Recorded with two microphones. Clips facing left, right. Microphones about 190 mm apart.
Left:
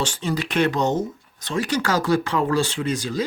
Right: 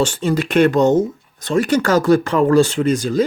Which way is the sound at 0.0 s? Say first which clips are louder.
Right 7 dB; 50° right (ahead or behind).